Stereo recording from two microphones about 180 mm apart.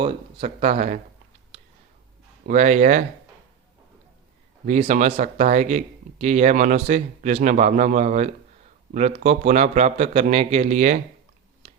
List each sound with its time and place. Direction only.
0.0 s speech: 35° right (ahead or behind)
2.5 s speech: 40° right (ahead or behind)
4.6 s speech: 40° right (ahead or behind)